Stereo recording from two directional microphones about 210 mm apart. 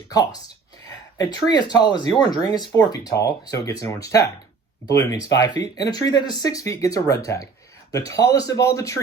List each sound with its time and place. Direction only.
0.1 s speech: 15° left (ahead or behind)